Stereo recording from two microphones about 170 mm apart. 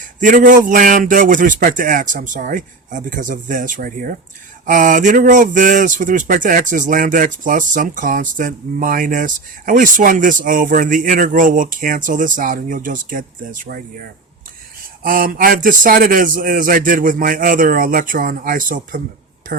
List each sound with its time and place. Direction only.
0.2 s speech: 50° right (ahead or behind)